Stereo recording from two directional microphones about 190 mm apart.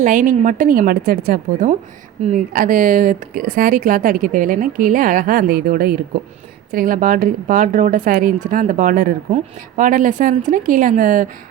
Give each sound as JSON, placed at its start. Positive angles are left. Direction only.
{"t": 0.0, "sound": "speech", "side_deg": -45}